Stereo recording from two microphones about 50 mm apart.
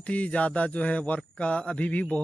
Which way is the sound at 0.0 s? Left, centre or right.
Left.